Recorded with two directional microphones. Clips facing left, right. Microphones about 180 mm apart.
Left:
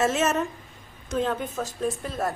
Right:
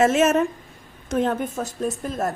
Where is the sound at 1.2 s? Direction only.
45° right (ahead or behind).